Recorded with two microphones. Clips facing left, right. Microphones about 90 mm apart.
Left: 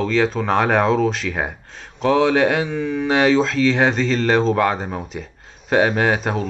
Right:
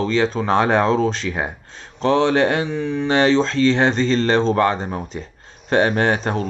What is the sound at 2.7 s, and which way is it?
Speech, 30° right (ahead or behind).